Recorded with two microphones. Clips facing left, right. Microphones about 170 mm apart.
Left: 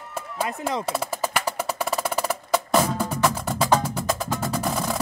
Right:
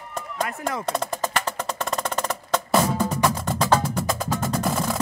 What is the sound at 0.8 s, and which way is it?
Music, 5° left (ahead or behind).